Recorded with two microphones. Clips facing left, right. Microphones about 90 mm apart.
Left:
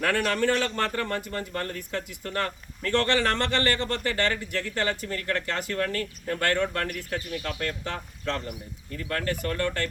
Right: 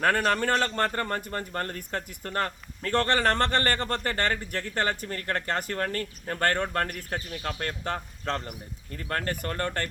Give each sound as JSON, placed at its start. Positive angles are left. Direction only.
{"t": 0.0, "sound": "a man's voice", "side_deg": -40}